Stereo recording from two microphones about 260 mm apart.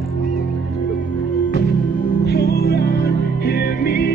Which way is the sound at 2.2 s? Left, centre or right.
Left.